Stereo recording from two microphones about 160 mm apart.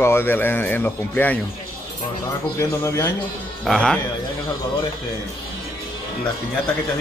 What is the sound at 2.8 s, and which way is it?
Speech, 15° left (ahead or behind).